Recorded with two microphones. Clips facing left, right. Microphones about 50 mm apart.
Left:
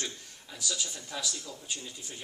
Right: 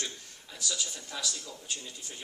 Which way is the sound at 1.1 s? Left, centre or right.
Centre.